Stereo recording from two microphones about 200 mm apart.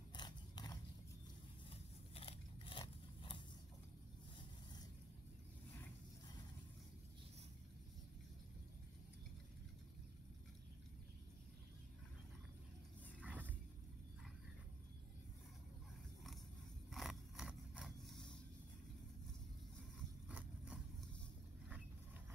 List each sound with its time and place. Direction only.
0.1 s biting: 20° left (ahead or behind)
2.1 s biting: 25° left (ahead or behind)
13.2 s vehicle: 10° right (ahead or behind)
16.9 s scrape: centre (ahead or behind)
20.2 s a sound: 5° right (ahead or behind)